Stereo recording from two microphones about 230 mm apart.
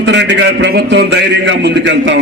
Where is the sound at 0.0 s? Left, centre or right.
Right.